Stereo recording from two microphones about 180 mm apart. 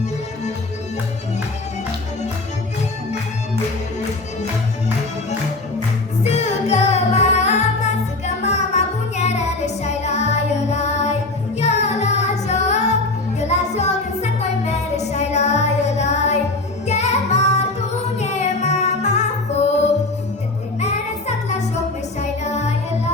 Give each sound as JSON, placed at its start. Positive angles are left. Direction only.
{"t": 6.2, "sound": "music", "side_deg": 40}
{"t": 20.7, "sound": "music", "side_deg": 40}